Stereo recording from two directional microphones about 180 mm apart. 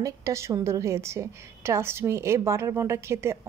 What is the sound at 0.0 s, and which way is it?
A woman's voice, 15° right (ahead or behind).